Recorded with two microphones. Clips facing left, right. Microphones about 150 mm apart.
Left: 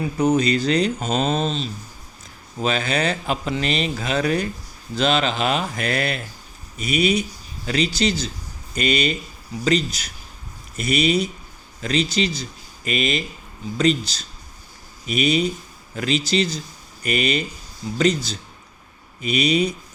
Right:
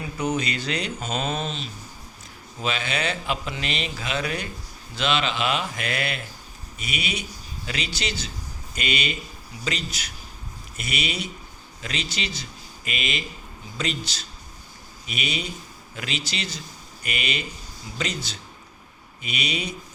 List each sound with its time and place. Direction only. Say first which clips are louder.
0.2 s speech: left 8 dB; 35° left (ahead or behind)